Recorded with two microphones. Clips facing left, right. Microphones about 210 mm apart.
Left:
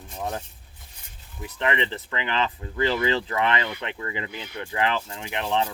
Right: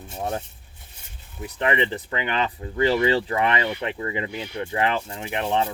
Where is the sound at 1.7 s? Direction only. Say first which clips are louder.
Right 3 dB; 20° right (ahead or behind).